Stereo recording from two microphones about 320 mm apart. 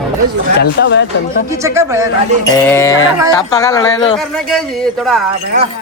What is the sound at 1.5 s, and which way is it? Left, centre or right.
Speech, centre.